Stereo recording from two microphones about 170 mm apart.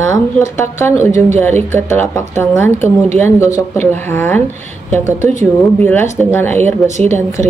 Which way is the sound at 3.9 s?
10° left (ahead or behind).